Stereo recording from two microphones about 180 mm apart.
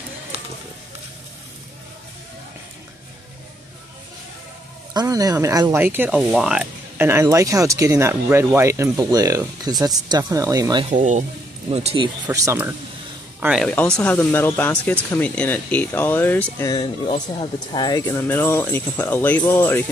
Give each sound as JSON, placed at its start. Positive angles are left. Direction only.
{"t": 4.9, "sound": "speech", "side_deg": -20}
{"t": 10.9, "sound": "speech", "side_deg": -45}
{"t": 12.3, "sound": "speech", "side_deg": -15}
{"t": 13.4, "sound": "speech", "side_deg": -5}